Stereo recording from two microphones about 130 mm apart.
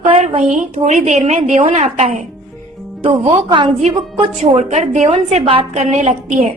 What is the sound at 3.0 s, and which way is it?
Speech, 45° right (ahead or behind).